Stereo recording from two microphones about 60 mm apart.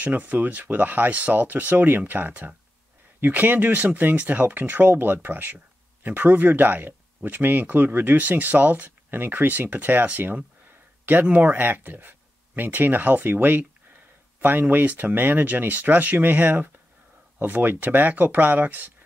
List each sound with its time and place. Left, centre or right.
0.0 s speech: right